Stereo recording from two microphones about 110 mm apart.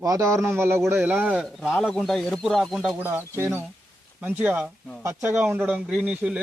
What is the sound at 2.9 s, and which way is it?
A man's voice, 20° right (ahead or behind).